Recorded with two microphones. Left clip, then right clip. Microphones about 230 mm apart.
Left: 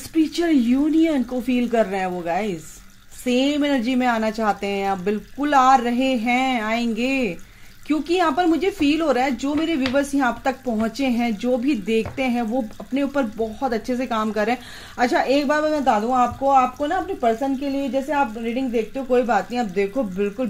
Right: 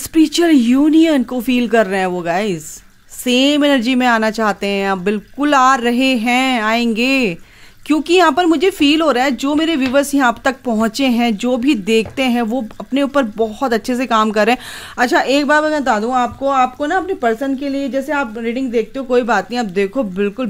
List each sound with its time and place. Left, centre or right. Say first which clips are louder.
0.1 s speech: right 7 dB; right